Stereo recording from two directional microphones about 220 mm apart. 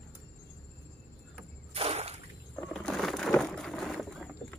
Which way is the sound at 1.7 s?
30° right (ahead or behind).